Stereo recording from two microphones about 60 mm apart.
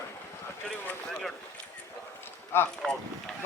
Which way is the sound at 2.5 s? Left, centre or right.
Left.